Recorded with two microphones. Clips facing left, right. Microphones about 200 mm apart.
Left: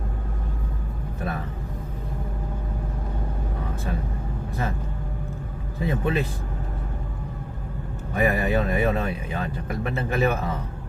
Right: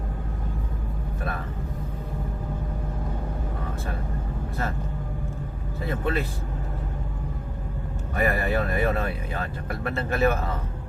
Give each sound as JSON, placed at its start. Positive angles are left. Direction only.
{"t": 5.8, "sound": "speech", "side_deg": 15}
{"t": 8.1, "sound": "speech", "side_deg": 15}